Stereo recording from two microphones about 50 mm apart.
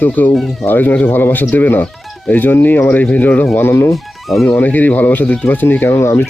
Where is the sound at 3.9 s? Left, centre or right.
Centre.